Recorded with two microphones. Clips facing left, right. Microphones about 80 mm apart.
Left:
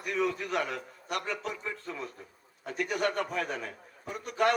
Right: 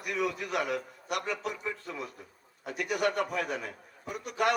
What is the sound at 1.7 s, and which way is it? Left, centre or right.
A man's voice, left.